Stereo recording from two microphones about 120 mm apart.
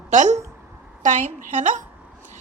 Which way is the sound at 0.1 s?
80° right.